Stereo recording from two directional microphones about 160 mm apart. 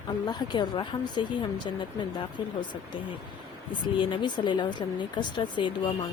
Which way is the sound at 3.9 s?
30° left (ahead or behind).